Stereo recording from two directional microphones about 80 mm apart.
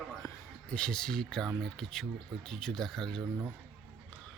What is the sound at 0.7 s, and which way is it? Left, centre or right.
Speech, centre.